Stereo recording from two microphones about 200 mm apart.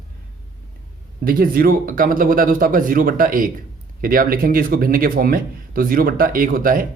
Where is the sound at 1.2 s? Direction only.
45° right (ahead or behind).